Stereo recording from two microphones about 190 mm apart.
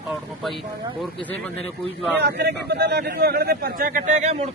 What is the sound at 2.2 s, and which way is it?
A man's voice, 60° right (ahead or behind).